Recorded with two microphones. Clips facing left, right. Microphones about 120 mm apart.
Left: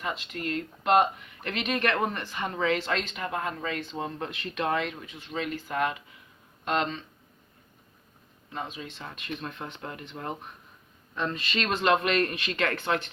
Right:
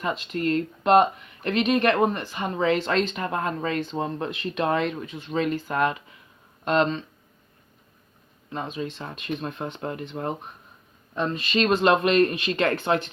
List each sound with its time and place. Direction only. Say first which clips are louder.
0.0 s speech: right 7 dB; 35° right (ahead or behind)
8.9 s speech: right 6 dB; 30° right (ahead or behind)